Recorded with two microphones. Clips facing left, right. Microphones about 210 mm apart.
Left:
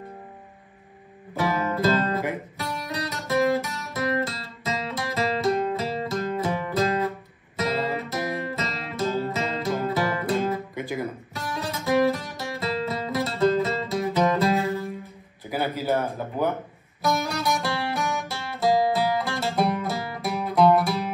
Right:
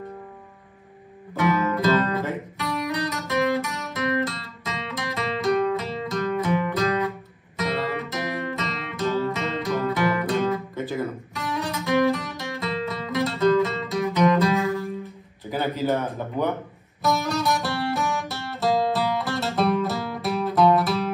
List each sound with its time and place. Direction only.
1.3 s music: 30° left (ahead or behind)
15.5 s a sound: 10° left (ahead or behind)
17.2 s music: centre (ahead or behind)